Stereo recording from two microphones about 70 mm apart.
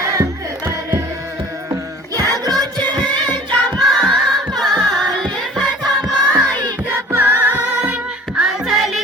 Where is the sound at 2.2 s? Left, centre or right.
Right.